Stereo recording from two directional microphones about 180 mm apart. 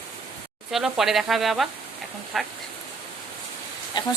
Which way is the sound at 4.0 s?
25° left (ahead or behind).